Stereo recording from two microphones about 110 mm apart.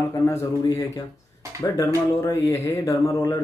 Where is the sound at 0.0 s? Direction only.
25° left (ahead or behind).